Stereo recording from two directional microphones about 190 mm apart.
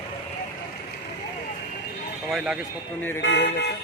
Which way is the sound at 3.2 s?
65° left (ahead or behind).